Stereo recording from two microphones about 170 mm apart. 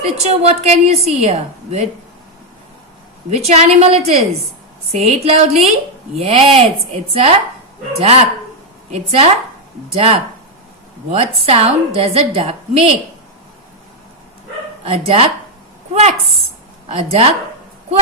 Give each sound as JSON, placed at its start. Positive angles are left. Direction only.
{"t": 0.0, "sound": "a woman's voice", "side_deg": -40}
{"t": 3.2, "sound": "a woman's voice", "side_deg": -40}
{"t": 14.8, "sound": "a woman's voice", "side_deg": -35}